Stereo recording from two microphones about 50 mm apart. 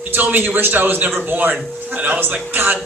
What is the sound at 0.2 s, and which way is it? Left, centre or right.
Speech, right.